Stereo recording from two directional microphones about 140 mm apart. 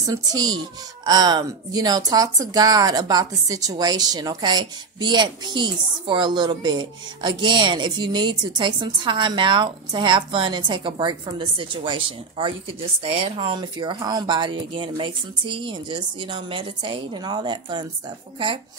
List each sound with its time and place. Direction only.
0.0 s a child's voice: 25° right (ahead or behind)